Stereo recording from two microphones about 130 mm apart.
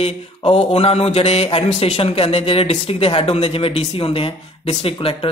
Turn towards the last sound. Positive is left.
turn(degrees=45)  # may be behind; listen again after turning